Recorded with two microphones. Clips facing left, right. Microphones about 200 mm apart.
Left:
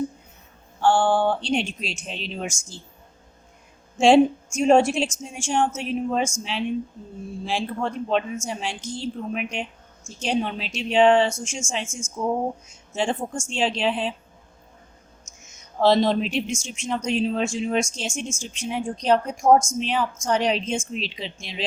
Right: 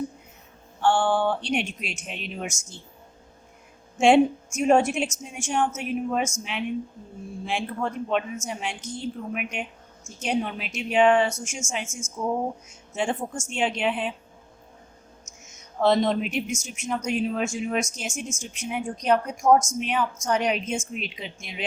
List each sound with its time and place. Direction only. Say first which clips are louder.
0.8 s speech: left 2 dB; 35° left (ahead or behind)
3.9 s speech: left 2 dB; 30° left (ahead or behind)
15.8 s speech: left 2 dB; 30° left (ahead or behind)